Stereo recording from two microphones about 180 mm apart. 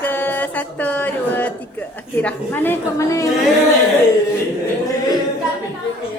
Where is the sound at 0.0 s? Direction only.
10° left (ahead or behind).